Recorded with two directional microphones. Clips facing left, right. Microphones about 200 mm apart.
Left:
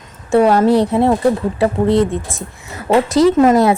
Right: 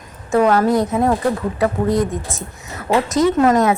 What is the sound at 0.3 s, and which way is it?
A woman's voice, 30° left (ahead or behind).